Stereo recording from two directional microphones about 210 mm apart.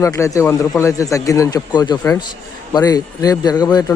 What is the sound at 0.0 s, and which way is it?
Speech, 15° left (ahead or behind).